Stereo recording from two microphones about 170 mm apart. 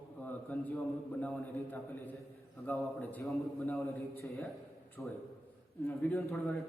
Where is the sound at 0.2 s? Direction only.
10° left (ahead or behind).